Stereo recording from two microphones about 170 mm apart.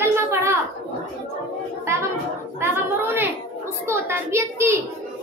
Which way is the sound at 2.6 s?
15° right (ahead or behind).